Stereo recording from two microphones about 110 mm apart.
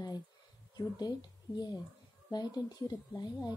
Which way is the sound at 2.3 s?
35° left (ahead or behind).